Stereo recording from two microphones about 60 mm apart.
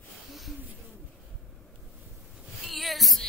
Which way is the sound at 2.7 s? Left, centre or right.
Centre.